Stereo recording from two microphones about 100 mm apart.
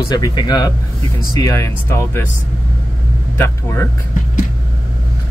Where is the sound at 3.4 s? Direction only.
30° left (ahead or behind).